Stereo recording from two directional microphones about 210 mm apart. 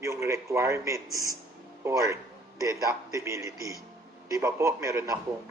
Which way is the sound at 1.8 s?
15° right (ahead or behind).